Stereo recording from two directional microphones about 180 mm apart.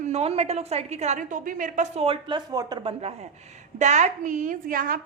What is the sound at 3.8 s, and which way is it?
A woman's voice, 40° right (ahead or behind).